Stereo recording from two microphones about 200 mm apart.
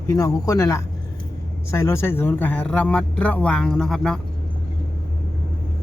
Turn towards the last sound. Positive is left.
turn(degrees=5)  # may be behind; listen again after turning